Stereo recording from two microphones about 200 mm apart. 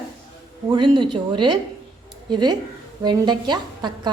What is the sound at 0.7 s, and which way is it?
A woman's voice, 25° right (ahead or behind).